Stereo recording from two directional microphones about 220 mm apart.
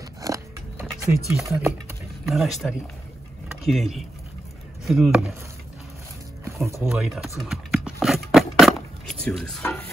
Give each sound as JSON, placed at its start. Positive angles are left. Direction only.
{"t": 0.2, "sound": "biting", "side_deg": -15}
{"t": 1.3, "sound": "speech", "side_deg": 0}
{"t": 6.8, "sound": "speech", "side_deg": 0}
{"t": 7.3, "sound": "a sound", "side_deg": 0}